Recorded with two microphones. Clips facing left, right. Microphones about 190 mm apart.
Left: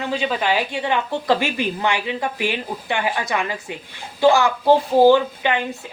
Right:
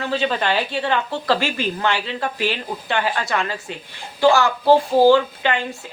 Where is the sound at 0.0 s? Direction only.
15° left (ahead or behind).